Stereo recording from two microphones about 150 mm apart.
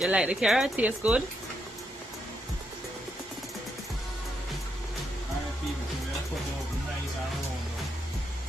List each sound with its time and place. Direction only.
0.0 s speech: 5° right (ahead or behind)